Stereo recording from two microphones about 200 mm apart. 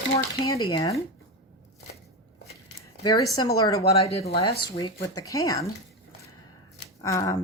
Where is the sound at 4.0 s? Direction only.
30° left (ahead or behind).